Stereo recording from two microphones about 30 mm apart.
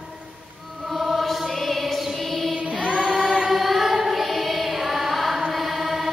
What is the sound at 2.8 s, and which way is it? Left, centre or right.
Music, right.